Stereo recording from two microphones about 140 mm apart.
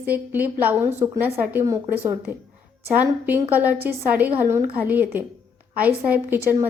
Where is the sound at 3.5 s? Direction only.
10° right (ahead or behind).